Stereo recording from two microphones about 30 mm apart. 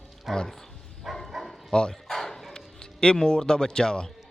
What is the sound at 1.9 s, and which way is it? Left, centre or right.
Bow-wow, centre.